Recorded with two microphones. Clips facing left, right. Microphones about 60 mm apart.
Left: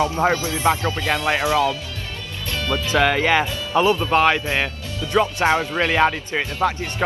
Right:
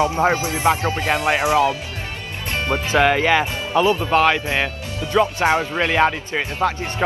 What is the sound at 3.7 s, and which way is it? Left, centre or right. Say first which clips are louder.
Speech: even; left.